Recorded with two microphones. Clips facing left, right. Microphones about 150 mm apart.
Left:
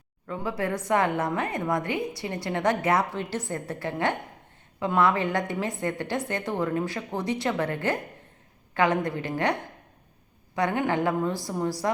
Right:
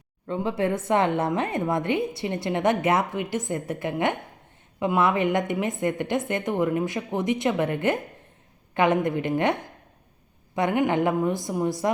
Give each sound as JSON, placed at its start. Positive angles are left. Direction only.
{"t": 0.3, "sound": "a woman's voice", "side_deg": -25}